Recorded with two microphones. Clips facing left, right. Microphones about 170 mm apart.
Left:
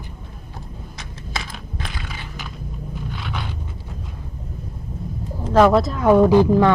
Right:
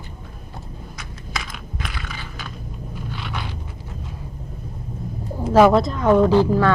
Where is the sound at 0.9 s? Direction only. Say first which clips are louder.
Left 1 dB; 30° left (ahead or behind).